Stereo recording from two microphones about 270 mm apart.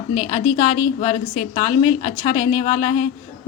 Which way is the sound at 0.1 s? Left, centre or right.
Centre.